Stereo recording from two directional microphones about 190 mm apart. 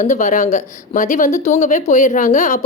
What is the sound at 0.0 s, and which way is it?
A woman's voice, 40° left (ahead or behind).